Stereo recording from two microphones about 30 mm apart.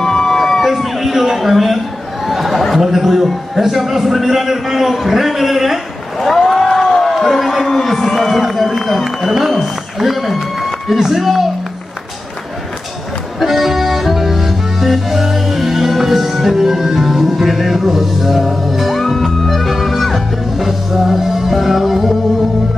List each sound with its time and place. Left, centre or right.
0.0 s a sound: centre
2.7 s a man's voice: centre
6.2 s a sound: centre
6.8 s a man's voice: centre
11.0 s a man's voice: centre
13.4 s music: centre